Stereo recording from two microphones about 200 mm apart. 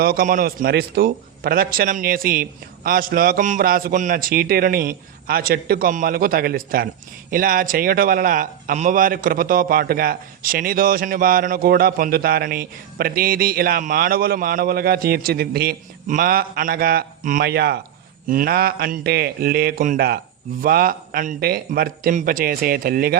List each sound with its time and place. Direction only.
0.0 s speech: 50° right (ahead or behind)